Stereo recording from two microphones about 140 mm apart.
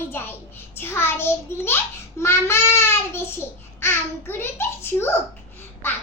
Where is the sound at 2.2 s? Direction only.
20° left (ahead or behind).